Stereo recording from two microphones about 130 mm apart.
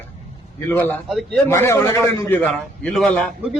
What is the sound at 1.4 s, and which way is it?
Speech, 20° left (ahead or behind).